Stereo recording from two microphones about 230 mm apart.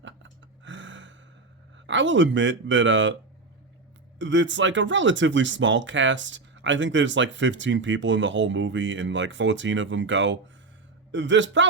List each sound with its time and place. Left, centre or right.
0.0 s gasp: right
1.9 s speech: right
4.2 s speech: right